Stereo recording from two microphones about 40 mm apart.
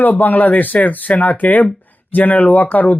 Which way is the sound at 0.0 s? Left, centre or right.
Left.